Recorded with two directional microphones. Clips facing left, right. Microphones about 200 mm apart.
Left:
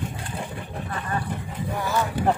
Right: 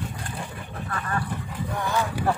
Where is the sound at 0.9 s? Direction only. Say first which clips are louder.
Even; 20° left (ahead or behind).